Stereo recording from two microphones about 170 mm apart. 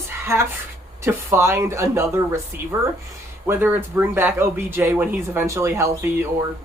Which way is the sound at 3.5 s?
10° right (ahead or behind).